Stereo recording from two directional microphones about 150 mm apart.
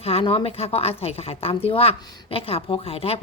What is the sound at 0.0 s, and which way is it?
A woman's voice, 40° left (ahead or behind).